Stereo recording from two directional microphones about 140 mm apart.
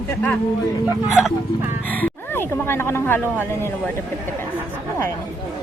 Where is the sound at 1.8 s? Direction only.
10° left (ahead or behind).